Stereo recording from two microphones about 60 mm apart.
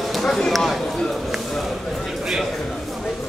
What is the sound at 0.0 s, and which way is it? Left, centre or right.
Speech, centre.